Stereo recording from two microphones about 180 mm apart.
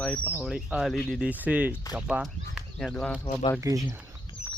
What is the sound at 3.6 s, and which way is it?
Speech, 20° right (ahead or behind).